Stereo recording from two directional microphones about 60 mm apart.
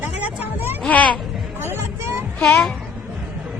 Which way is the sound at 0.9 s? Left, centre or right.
Left.